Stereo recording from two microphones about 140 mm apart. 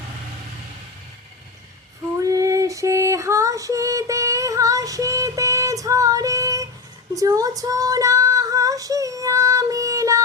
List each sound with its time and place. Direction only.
2.1 s female singing: 25° right (ahead or behind)